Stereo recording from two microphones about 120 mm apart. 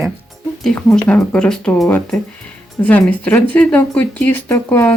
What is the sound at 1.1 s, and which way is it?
Speech, 10° left (ahead or behind).